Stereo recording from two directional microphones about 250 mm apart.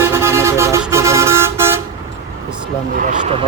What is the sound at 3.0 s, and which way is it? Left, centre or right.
Speech, right.